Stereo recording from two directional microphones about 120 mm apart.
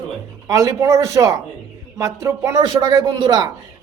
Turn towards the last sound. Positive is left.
turn(degrees=-35)  # may be behind; listen again after turning